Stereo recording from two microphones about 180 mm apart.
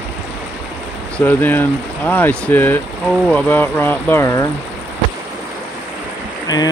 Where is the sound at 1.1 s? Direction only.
10° left (ahead or behind).